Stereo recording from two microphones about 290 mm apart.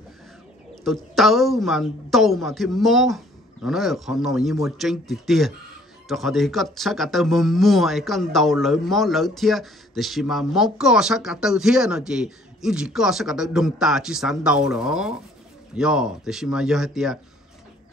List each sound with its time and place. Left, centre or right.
0.8 s speech: centre